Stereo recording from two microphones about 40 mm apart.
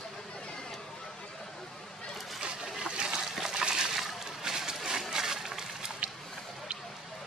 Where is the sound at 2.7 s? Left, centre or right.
Centre.